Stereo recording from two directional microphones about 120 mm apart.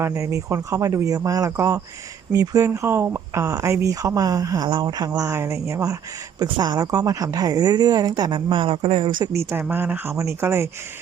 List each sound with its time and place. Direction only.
0.0 s speech: 25° right (ahead or behind)
5.3 s speech: 20° right (ahead or behind); by 9.3 s 45° right (ahead or behind)
9.3 s speech: 20° right (ahead or behind)